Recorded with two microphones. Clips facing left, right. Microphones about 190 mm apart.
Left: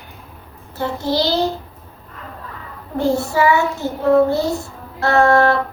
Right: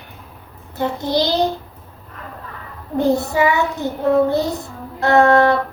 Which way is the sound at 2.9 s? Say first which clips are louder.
Right 1 dB; 15° right (ahead or behind).